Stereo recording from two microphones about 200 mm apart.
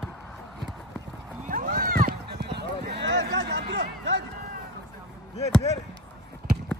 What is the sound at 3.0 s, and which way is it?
Music, 55° right (ahead or behind).